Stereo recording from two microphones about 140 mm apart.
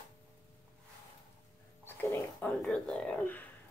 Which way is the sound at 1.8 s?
15° left (ahead or behind).